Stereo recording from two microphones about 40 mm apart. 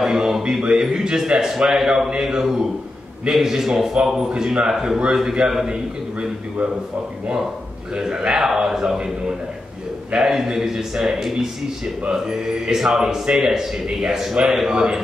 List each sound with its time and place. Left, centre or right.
0.0 s a man's voice: centre
7.9 s a man's voice: right
8.4 s a man's voice: centre
10.1 s a man's voice: centre
14.7 s a man's voice: centre